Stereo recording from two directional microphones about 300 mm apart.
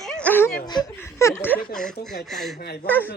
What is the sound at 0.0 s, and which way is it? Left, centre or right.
Speech, centre.